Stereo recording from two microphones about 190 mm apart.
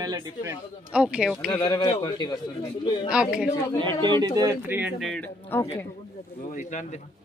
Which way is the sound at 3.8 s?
25° right (ahead or behind).